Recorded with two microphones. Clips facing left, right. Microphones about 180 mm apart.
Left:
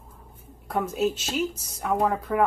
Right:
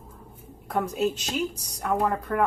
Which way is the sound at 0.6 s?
Centre (ahead or behind).